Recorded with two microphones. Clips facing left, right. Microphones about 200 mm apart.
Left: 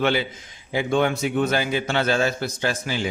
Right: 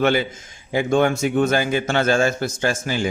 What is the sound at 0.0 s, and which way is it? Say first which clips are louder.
A man's voice: right 3 dB; 45° right (ahead or behind).